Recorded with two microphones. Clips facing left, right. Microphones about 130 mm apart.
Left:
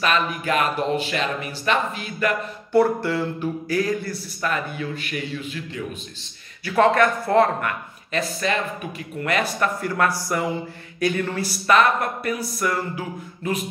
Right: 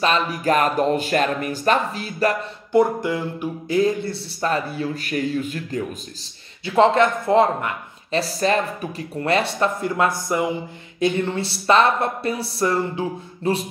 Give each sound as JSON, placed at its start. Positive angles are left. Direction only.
{"t": 0.0, "sound": "a man's voice", "side_deg": -35}
{"t": 2.7, "sound": "a man's voice", "side_deg": -15}
{"t": 6.6, "sound": "speech", "side_deg": -25}
{"t": 8.2, "sound": "speech", "side_deg": -35}